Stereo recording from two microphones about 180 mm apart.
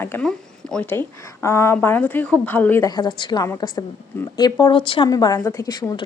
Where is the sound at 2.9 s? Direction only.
25° left (ahead or behind).